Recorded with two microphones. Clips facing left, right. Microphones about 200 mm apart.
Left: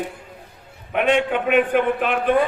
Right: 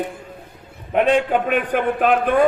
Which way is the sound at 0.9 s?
35° right (ahead or behind).